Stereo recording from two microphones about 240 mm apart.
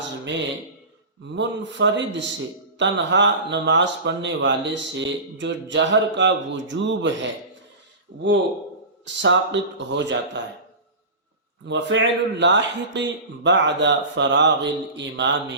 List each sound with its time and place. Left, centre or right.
1.3 s speech: right
11.6 s speech: right